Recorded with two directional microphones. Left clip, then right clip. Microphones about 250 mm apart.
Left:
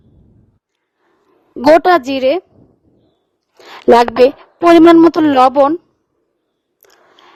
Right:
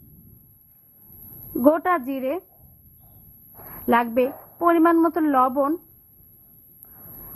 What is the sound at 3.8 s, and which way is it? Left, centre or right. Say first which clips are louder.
A woman's voice: left 12 dB; left.